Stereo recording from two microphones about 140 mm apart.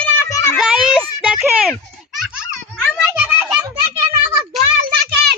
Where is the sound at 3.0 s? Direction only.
5° right (ahead or behind).